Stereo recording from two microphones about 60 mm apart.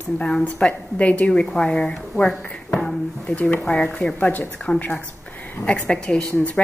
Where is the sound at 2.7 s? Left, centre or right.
Centre.